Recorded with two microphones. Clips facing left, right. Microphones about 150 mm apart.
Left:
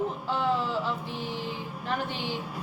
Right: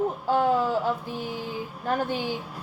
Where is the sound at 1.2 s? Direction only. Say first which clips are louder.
Right 1 dB; 10° right (ahead or behind).